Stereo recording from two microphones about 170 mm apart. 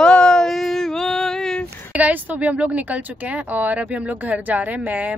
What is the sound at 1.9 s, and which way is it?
Speech, 10° right (ahead or behind).